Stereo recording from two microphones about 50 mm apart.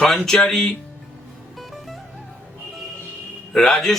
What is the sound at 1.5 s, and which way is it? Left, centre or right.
Music, centre.